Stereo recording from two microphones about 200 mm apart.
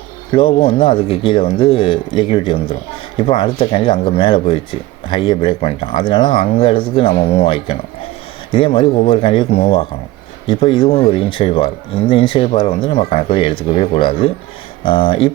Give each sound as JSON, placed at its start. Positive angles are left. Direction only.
{"t": 0.3, "sound": "speech", "side_deg": 25}